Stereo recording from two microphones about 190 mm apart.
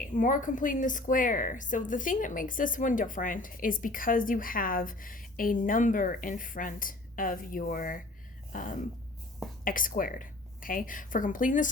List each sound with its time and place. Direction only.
0.2 s a woman's voice: 45° left (ahead or behind)